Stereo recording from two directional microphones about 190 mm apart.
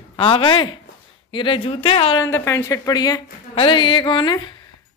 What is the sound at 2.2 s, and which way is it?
Speech, 15° left (ahead or behind).